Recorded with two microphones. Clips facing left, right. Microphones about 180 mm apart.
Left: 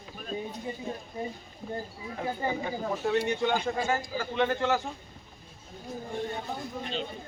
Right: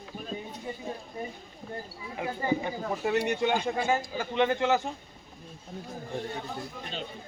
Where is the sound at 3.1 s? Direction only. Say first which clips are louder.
Right 1 dB; 15° right (ahead or behind).